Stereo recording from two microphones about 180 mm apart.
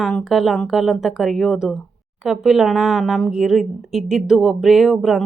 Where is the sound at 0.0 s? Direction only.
Centre (ahead or behind).